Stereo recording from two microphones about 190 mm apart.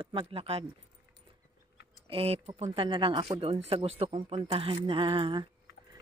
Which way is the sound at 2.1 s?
30° right (ahead or behind).